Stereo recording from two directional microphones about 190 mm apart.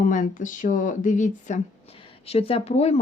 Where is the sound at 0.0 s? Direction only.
40° left (ahead or behind).